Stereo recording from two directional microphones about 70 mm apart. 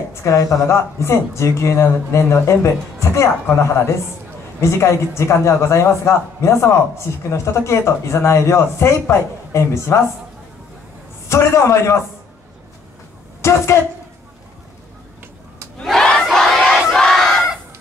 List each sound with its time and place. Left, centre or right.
0.1 s speech: left
11.2 s speech: left
13.4 s a woman's voice: left
15.8 s crowd: centre
16.3 s battle cry: centre